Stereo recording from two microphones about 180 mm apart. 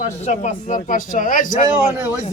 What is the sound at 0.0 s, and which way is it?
A man's voice, 40° left (ahead or behind).